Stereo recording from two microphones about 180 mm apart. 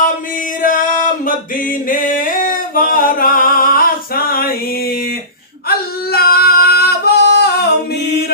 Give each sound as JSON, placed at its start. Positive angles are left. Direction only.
{"t": 0.6, "sound": "singing", "side_deg": 50}